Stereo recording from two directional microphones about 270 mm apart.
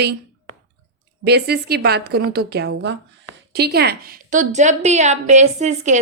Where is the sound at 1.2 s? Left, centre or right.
Right.